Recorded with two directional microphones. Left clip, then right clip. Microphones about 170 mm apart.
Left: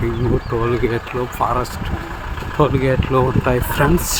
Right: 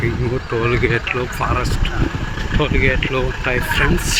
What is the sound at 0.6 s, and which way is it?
Speech, 5° left (ahead or behind).